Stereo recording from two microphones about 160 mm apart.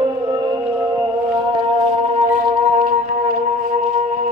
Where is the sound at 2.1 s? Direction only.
60° right (ahead or behind).